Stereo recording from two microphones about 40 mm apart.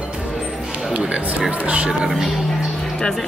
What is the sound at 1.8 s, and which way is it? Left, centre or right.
Speech, centre.